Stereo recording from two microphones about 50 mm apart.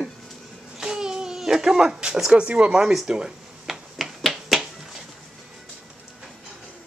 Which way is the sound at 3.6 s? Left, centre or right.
Centre.